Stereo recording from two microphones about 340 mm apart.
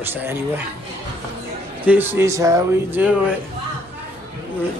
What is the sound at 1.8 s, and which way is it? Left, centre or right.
A man's voice, centre.